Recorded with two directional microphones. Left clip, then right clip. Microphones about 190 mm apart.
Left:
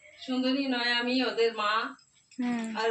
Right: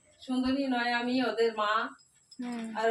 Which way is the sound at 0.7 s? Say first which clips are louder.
Left 2 dB; 30° right (ahead or behind).